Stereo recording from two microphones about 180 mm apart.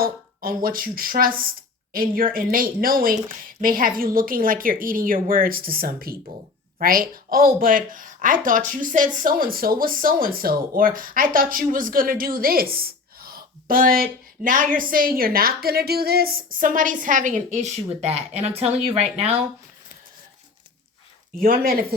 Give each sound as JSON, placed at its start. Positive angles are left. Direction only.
{"t": 0.0, "sound": "speech", "side_deg": -55}
{"t": 21.3, "sound": "speech", "side_deg": -50}